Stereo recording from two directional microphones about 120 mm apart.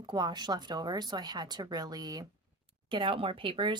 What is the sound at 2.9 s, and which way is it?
Speech, 45° right (ahead or behind).